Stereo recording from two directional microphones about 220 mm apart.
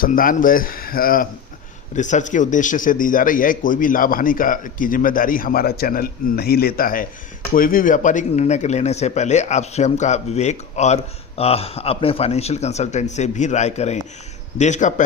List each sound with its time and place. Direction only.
0.0 s speech: 40° left (ahead or behind)